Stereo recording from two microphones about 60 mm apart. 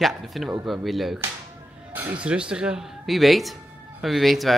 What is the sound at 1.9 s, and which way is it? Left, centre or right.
Speech, right.